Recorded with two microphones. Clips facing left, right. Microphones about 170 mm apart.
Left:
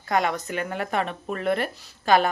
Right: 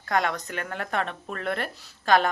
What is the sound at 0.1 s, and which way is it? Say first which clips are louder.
Speech: left 2 dB; 5° left (ahead or behind).